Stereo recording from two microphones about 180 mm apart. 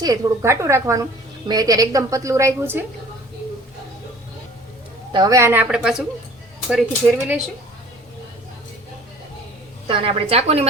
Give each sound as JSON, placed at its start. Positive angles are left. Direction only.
{"t": 0.0, "sound": "a woman's voice", "side_deg": -20}
{"t": 5.1, "sound": "a woman's voice", "side_deg": -20}
{"t": 5.6, "sound": "speech", "side_deg": -5}
{"t": 9.8, "sound": "a woman's voice", "side_deg": -30}